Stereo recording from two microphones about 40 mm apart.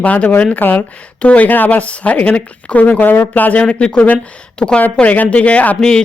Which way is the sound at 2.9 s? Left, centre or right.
Left.